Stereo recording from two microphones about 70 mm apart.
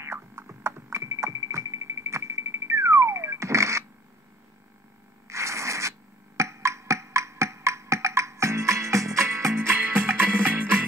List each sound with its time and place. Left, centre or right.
0.0 s music: right
5.3 s music: right
9.8 s music: right